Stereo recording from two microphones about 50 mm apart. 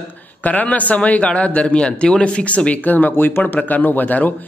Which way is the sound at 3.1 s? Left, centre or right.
Left.